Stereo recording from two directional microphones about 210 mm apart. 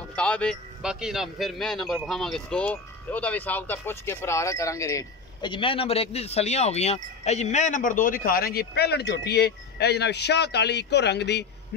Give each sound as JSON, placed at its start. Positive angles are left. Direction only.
{"t": 0.1, "sound": "a man's voice", "side_deg": 5}